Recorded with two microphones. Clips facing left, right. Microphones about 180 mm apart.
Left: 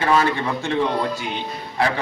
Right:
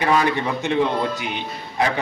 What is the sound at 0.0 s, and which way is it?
A man's voice, 15° right (ahead or behind).